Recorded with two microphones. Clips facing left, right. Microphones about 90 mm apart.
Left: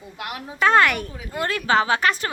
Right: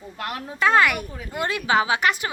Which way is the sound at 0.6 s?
Centre (ahead or behind).